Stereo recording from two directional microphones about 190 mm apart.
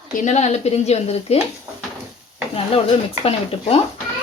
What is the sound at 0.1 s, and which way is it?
Speech, 40° left (ahead or behind).